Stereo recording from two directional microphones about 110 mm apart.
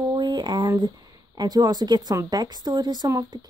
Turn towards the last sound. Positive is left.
turn(degrees=-35)  # may be behind; listen again after turning